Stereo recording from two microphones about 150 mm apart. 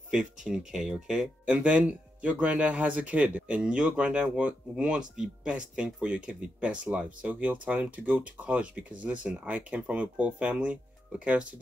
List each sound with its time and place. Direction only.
0.1 s speech: 5° right (ahead or behind)